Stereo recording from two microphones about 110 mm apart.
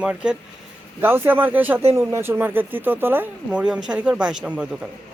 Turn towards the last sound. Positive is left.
turn(degrees=-10)  # may be behind; listen again after turning